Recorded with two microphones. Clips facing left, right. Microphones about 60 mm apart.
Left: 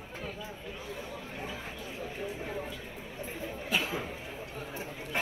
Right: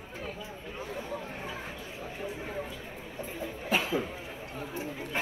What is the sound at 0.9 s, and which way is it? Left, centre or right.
Chatter, right.